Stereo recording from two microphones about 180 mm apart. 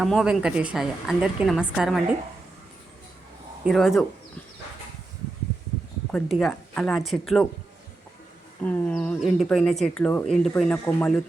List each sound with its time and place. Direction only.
0.0 s a woman's voice: centre (ahead or behind)
3.6 s a woman's voice: centre (ahead or behind)
6.1 s a woman's voice: 5° left (ahead or behind)
8.6 s speech: 10° left (ahead or behind)